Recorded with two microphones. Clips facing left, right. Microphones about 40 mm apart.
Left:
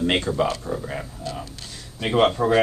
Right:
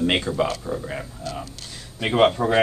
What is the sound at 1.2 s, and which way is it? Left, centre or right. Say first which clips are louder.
Speech: even; centre.